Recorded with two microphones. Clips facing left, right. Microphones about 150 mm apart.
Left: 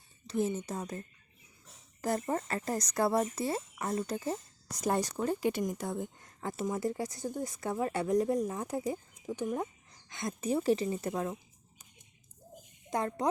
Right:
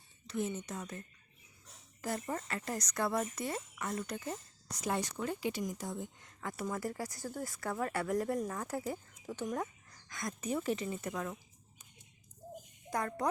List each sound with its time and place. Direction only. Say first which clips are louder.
0.3 s speech: left 5 dB; 30° left (ahead or behind)
5.5 s speech: left 5 dB; 55° left (ahead or behind)
6.2 s speech: left 4 dB; 25° left (ahead or behind)
12.9 s speech: left 3 dB; 25° left (ahead or behind)